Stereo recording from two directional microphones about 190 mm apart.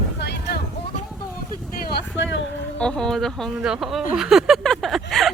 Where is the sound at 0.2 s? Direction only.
60° left (ahead or behind).